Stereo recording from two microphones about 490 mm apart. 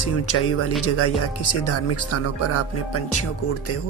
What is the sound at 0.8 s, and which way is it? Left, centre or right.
Speech, left.